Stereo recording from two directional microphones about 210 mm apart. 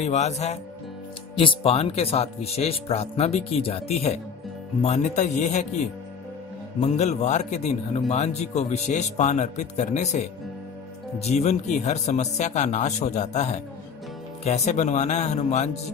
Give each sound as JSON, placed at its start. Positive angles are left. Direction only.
{"t": 0.0, "sound": "speech", "side_deg": 30}
{"t": 6.8, "sound": "speech", "side_deg": 30}